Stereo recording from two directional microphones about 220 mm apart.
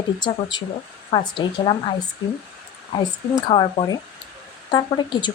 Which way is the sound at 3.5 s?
20° left (ahead or behind).